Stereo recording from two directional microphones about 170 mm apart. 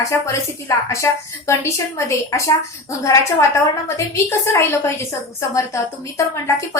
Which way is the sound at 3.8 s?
15° left (ahead or behind).